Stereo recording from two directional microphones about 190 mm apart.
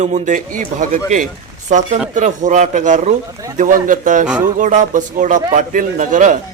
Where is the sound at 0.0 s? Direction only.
40° right (ahead or behind).